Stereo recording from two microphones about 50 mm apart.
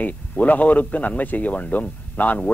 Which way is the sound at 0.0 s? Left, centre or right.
Left.